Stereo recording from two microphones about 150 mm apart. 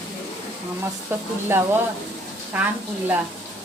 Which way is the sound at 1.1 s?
15° right (ahead or behind).